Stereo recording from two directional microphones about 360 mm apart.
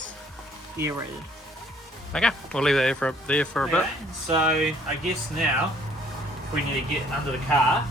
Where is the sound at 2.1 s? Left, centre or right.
Centre.